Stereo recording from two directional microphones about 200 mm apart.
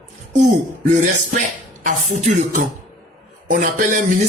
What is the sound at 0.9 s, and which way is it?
Music, 40° right (ahead or behind).